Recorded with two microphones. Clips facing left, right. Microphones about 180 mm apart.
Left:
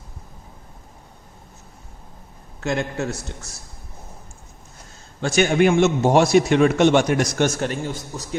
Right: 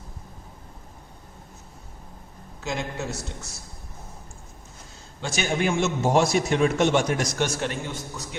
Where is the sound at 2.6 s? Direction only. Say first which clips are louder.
Left 6 dB; 60° left (ahead or behind).